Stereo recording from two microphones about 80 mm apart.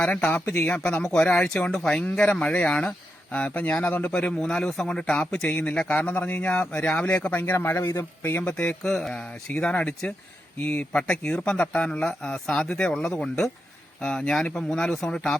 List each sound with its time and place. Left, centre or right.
0.0 s speech: centre
4.1 s speech: centre